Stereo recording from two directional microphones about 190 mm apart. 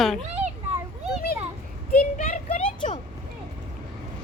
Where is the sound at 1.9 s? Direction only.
40° left (ahead or behind).